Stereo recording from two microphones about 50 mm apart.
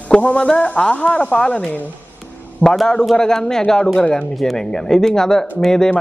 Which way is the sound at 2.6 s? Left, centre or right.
Right.